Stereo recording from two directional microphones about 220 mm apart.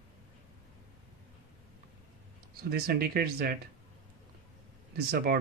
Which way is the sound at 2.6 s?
45° right (ahead or behind).